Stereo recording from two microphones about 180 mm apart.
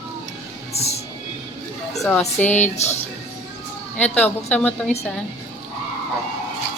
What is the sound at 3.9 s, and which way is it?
Speech, 10° left (ahead or behind).